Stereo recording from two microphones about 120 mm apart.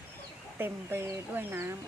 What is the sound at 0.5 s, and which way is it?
Speech, 20° right (ahead or behind).